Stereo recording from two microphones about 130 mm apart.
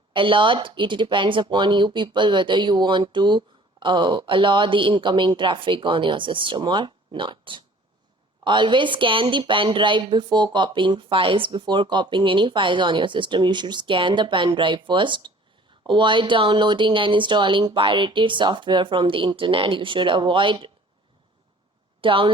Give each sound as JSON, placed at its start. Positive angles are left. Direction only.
{"t": 0.1, "sound": "speech", "side_deg": -40}
{"t": 22.0, "sound": "a woman's voice", "side_deg": -40}